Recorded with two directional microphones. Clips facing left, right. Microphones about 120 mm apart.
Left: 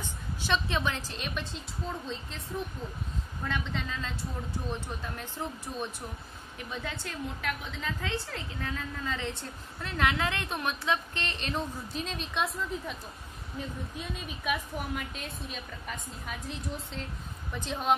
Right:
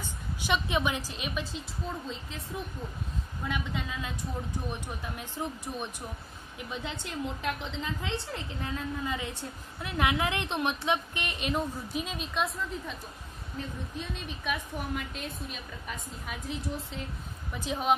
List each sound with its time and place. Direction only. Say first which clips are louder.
0.4 s a woman's voice: right 1 dB; 15° right (ahead or behind)
3.4 s a woman's voice: even; 10° right (ahead or behind)
13.9 s a woman's voice: right 1 dB; 5° left (ahead or behind)